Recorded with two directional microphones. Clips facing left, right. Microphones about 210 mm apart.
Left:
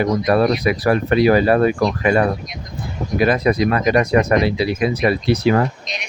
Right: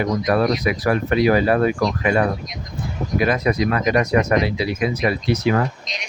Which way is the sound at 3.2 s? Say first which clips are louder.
Left 3 dB; 35° left (ahead or behind).